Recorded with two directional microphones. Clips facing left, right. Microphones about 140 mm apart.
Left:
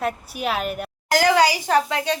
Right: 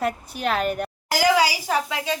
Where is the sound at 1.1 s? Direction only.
5° right (ahead or behind).